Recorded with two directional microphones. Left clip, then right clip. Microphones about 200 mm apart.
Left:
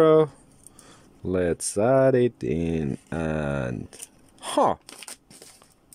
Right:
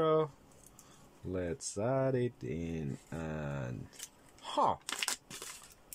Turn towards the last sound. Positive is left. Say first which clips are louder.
# right 6 dB
turn(degrees=0)  # may be behind; listen again after turning